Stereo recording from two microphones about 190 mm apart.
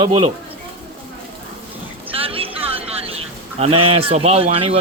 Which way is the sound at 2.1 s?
30° right (ahead or behind).